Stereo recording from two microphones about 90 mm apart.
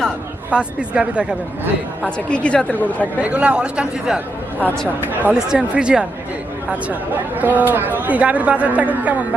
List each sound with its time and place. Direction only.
0.5 s speech: 10° right (ahead or behind)
2.0 s a woman's voice: 10° left (ahead or behind)
3.2 s speech: 15° right (ahead or behind)
7.3 s speech: 20° right (ahead or behind)